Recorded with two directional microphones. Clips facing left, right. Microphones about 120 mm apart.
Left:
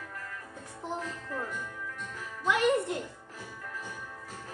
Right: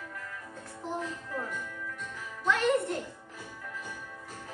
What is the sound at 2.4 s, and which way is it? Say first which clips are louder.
Music: even; 15° left (ahead or behind).